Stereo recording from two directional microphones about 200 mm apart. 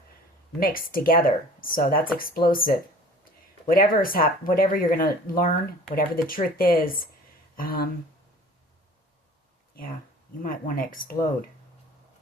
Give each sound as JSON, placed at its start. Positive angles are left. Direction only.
{"t": 0.6, "sound": "speech", "side_deg": 45}
{"t": 10.4, "sound": "speech", "side_deg": 45}